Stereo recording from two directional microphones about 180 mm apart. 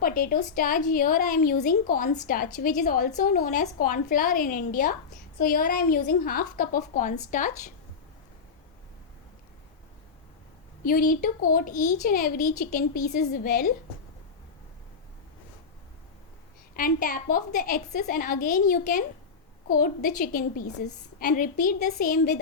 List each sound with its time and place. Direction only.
0.0 s a woman's voice: 55° left (ahead or behind)
10.8 s a woman's voice: 50° left (ahead or behind)
16.7 s a woman's voice: 50° left (ahead or behind)
21.2 s a woman's voice: 50° left (ahead or behind)